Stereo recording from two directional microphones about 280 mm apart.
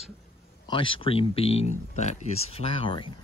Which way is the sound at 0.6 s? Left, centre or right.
Centre.